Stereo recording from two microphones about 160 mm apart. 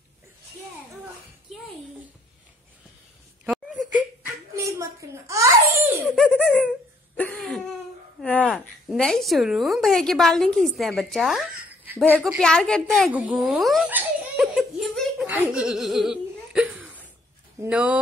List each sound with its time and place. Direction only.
3.4 s a sound: centre (ahead or behind)
4.6 s babbling: 20° right (ahead or behind)
6.0 s laughter: 5° left (ahead or behind)
7.2 s a sound: 5° left (ahead or behind)
8.2 s a woman's voice: 5° left (ahead or behind); by 12.4 s 10° right (ahead or behind)
12.4 s speech: 5° left (ahead or behind)
13.8 s giggle: 10° right (ahead or behind)
17.6 s speech: 5° right (ahead or behind)